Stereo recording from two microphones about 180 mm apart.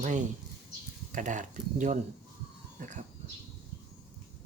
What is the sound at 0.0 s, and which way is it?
Speech, 45° right (ahead or behind).